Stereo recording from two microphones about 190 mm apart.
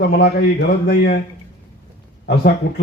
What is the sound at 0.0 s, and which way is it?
Speech, 60° left (ahead or behind).